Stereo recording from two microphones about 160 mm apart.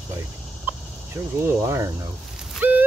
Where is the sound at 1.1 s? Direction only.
15° right (ahead or behind).